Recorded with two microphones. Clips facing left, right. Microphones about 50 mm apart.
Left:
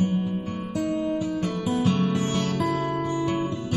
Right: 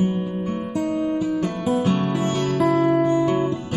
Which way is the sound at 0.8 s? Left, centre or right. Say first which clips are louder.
Right 3 dB; centre.